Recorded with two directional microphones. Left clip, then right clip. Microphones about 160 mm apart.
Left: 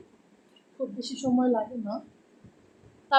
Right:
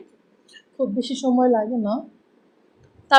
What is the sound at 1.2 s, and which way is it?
Speech, 55° right (ahead or behind).